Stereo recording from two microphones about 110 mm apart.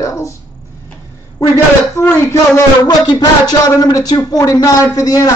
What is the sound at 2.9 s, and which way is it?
A man's voice, 35° left (ahead or behind).